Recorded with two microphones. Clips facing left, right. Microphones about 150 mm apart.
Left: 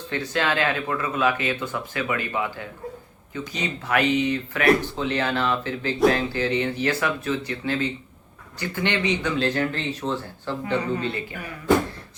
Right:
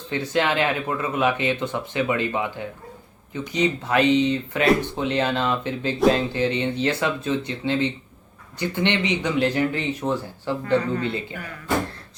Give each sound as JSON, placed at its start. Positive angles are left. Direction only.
{"t": 0.3, "sound": "speech", "side_deg": -20}
{"t": 10.7, "sound": "speech", "side_deg": 15}
{"t": 11.0, "sound": "speech", "side_deg": -20}